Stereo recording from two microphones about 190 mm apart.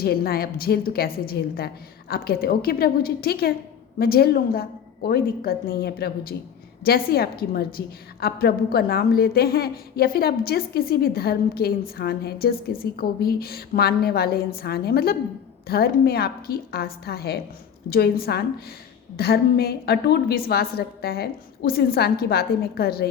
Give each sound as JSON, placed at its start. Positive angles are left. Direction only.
{"t": 0.0, "sound": "a woman's voice", "side_deg": 55}